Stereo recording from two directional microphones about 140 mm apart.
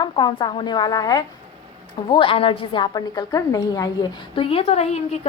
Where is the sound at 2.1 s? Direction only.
40° left (ahead or behind).